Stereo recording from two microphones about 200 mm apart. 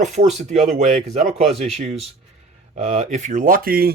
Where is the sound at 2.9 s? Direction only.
35° right (ahead or behind).